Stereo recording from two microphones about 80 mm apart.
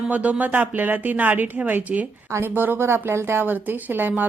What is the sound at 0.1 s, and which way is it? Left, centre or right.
Speech, centre.